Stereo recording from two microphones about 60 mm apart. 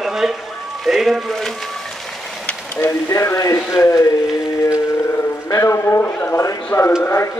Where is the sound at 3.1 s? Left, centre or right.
Left.